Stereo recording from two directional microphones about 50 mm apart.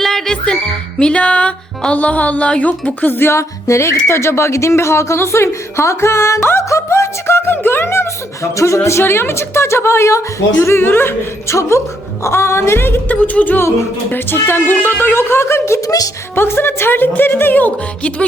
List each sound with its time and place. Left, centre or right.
0.0 s music: centre
0.4 s music: centre; by 3.3 s left
3.3 s speech: left
6.7 s speech: left
11.4 s a woman's voice: left
13.1 s speech: left
14.1 s a woman's voice: left
16.3 s a woman's voice: left